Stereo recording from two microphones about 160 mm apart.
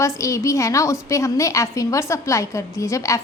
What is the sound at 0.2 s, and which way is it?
A woman's voice, 20° left (ahead or behind).